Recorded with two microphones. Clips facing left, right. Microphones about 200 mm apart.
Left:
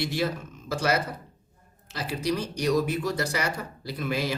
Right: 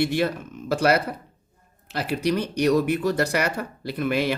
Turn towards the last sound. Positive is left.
turn(degrees=-60)  # may be behind; listen again after turning